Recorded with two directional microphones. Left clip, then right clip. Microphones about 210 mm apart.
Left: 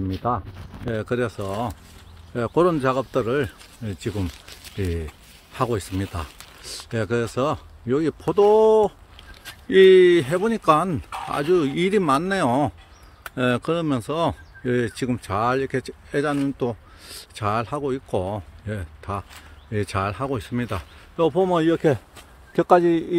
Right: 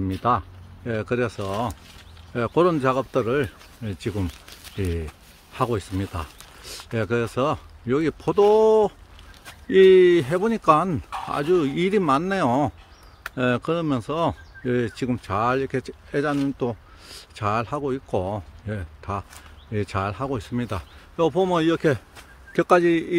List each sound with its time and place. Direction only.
0.1 s speech: 15° right (ahead or behind)
0.8 s speech: centre (ahead or behind)
4.3 s a sound: 25° right (ahead or behind)
5.5 s speech: centre (ahead or behind)